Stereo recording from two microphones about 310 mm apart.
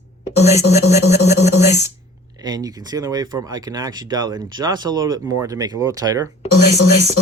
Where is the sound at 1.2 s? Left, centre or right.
Left.